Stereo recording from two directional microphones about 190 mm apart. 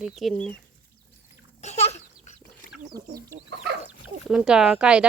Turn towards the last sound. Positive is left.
turn(degrees=-5)  # may be behind; listen again after turning